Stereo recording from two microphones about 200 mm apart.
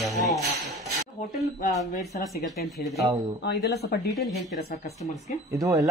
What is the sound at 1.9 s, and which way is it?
Speech, 45° left (ahead or behind).